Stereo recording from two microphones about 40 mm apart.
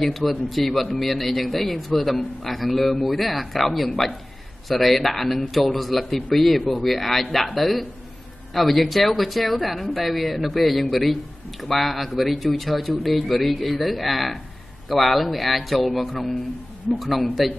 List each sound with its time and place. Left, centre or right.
0.0 s speech: centre